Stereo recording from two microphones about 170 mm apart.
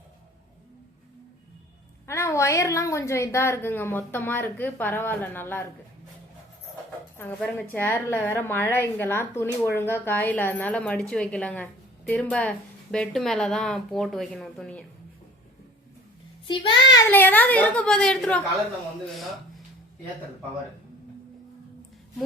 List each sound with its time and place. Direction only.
2.0 s a woman's voice: 15° left (ahead or behind)
7.2 s a woman's voice: 10° left (ahead or behind)
16.5 s a child's voice: 25° left (ahead or behind)
17.1 s a woman's voice: 10° left (ahead or behind)